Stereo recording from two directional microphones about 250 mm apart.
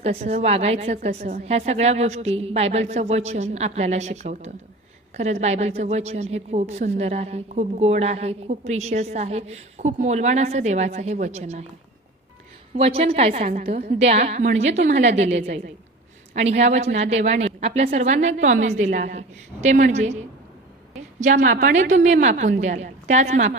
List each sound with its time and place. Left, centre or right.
0.0 s a woman's voice: right
12.7 s a woman's voice: right
21.2 s a woman's voice: right